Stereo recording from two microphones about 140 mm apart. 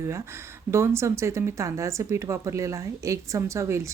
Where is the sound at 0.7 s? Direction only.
20° right (ahead or behind).